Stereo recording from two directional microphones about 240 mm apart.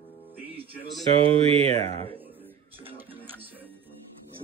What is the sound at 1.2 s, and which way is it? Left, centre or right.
Speech, right.